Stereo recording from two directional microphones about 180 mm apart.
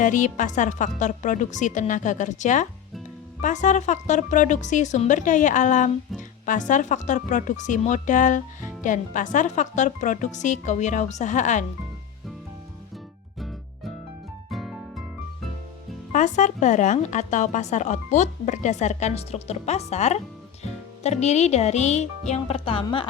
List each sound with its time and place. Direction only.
0.0 s speech: 45° left (ahead or behind)
14.5 s music: centre (ahead or behind)
16.1 s a woman's voice: 40° left (ahead or behind)